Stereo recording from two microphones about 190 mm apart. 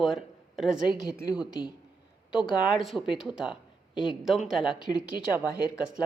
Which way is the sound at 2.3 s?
5° right (ahead or behind).